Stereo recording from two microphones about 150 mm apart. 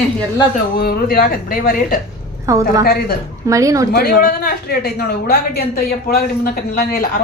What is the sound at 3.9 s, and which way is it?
A woman's voice, 90° left.